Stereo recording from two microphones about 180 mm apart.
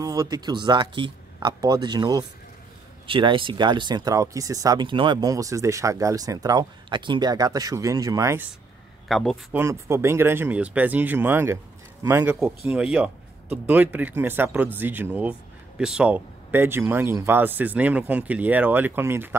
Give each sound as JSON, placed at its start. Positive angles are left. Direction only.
{"t": 0.0, "sound": "speech", "side_deg": -20}
{"t": 9.0, "sound": "a man's voice", "side_deg": 0}
{"t": 9.5, "sound": "speech", "side_deg": -15}
{"t": 12.4, "sound": "speech", "side_deg": -5}